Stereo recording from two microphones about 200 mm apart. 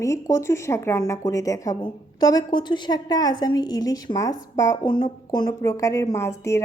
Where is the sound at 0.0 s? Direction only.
15° left (ahead or behind).